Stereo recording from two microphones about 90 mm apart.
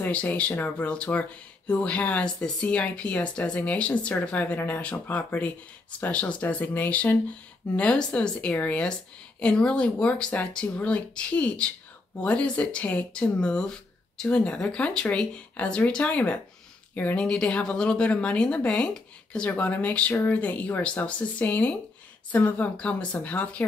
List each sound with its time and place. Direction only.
0.0 s speech: 15° left (ahead or behind)